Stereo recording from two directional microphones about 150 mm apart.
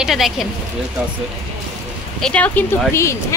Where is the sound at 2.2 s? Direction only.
5° left (ahead or behind).